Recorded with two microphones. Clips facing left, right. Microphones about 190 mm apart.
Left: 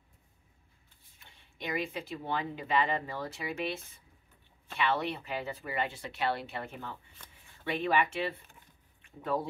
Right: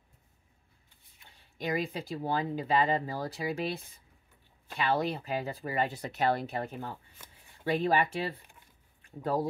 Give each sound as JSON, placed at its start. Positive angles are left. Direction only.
{"t": 1.6, "sound": "speech", "side_deg": -40}
{"t": 7.2, "sound": "speech", "side_deg": -10}
{"t": 7.6, "sound": "speech", "side_deg": -35}